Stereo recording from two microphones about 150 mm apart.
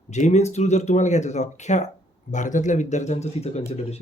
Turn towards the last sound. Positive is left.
turn(degrees=45)  # may be behind; listen again after turning